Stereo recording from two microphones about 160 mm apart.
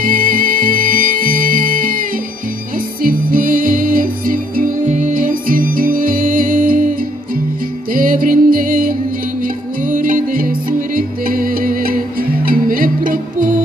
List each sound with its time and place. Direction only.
0.0 s music: 60° right (ahead or behind)
7.9 s music: 60° right (ahead or behind)